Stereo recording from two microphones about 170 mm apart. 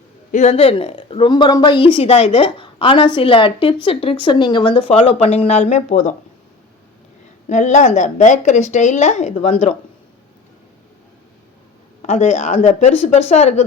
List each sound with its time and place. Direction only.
0.3 s a woman's voice: 45° left (ahead or behind)
7.4 s speech: 45° left (ahead or behind)
12.0 s a woman's voice: 40° left (ahead or behind)